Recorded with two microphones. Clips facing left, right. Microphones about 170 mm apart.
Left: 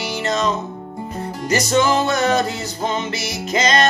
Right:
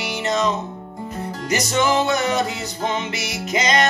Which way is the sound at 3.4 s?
15° right (ahead or behind).